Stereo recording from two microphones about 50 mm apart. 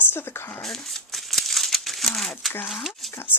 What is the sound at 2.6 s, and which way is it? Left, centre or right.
Speech, centre.